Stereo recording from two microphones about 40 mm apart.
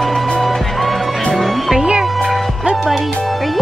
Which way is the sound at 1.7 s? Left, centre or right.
Right.